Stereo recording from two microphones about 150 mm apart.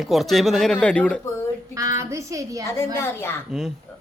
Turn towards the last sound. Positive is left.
turn(degrees=0)  # may be behind; listen again after turning